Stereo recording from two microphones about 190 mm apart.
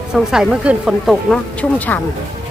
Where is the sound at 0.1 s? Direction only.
5° right (ahead or behind).